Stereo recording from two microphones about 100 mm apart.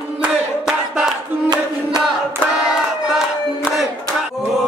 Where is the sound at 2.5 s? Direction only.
5° right (ahead or behind).